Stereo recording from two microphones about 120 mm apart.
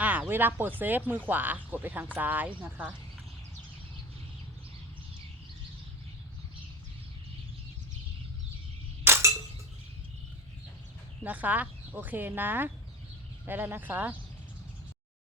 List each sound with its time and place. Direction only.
0.0 s a sound: 15° right (ahead or behind)
0.8 s speech: 15° right (ahead or behind)
9.0 s chink: 20° right (ahead or behind)
11.2 s speech: 15° right (ahead or behind)